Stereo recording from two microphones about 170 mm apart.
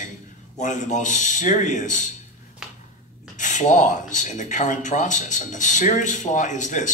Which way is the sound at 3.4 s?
45° left (ahead or behind).